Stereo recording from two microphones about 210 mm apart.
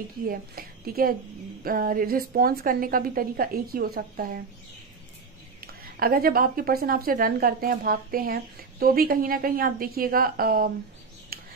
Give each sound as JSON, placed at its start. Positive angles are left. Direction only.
{"t": 0.3, "sound": "a woman's voice", "side_deg": -45}
{"t": 5.6, "sound": "a woman's voice", "side_deg": -45}
{"t": 11.3, "sound": "a sound", "side_deg": -45}